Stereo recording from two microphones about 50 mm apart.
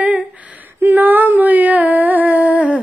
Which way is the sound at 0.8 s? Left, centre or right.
Right.